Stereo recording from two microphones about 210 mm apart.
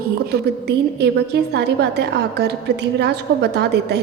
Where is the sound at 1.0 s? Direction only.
50° right (ahead or behind).